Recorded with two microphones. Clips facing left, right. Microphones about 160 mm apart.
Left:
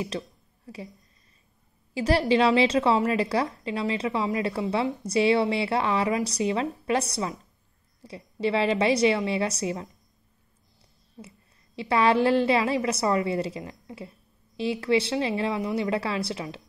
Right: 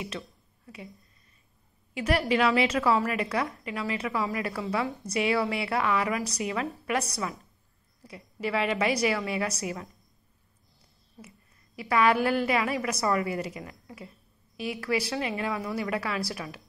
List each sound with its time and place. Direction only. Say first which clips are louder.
2.0 s a woman's voice: left 4 dB; 30° left (ahead or behind)
11.1 s a woman's voice: left 4 dB; 25° left (ahead or behind)